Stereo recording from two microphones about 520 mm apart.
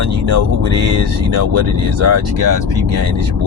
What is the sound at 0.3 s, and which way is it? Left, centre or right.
Speech, right.